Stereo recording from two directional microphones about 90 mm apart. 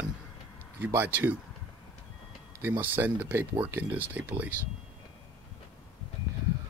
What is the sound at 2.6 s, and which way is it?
Speech, 25° right (ahead or behind).